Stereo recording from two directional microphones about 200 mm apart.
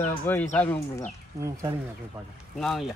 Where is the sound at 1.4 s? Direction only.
15° right (ahead or behind).